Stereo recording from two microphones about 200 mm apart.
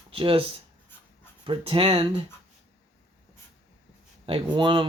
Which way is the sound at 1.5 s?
25° right (ahead or behind).